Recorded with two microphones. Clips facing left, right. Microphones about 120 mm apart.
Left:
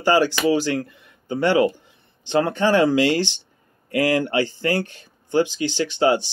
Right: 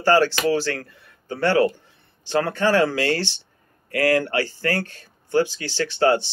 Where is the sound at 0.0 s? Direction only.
15° left (ahead or behind).